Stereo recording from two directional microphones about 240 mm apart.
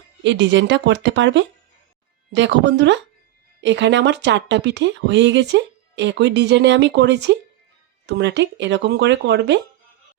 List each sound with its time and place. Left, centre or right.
0.2 s a woman's voice: right